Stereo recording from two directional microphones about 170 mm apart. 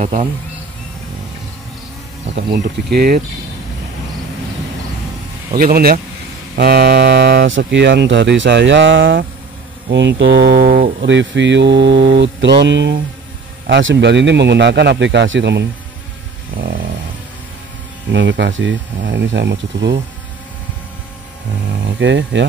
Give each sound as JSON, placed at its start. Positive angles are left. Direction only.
{"t": 0.0, "sound": "speech", "side_deg": -40}
{"t": 2.3, "sound": "speech", "side_deg": -70}
{"t": 5.6, "sound": "speech", "side_deg": -60}
{"t": 16.5, "sound": "a sound", "side_deg": -60}
{"t": 18.1, "sound": "speech", "side_deg": -90}
{"t": 22.0, "sound": "speech", "side_deg": -90}